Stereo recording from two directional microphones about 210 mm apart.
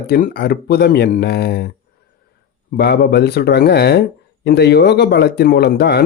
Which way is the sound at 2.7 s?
50° left (ahead or behind).